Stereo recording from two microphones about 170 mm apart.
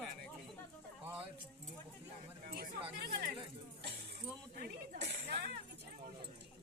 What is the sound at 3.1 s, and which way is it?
Speech, 70° right (ahead or behind).